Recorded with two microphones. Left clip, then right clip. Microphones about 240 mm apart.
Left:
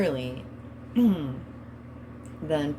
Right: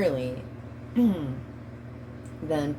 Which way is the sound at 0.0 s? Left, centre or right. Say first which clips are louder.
Right 2 dB; left.